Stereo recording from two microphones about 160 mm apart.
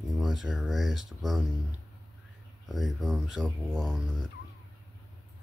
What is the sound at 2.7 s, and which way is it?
Speech, centre (ahead or behind).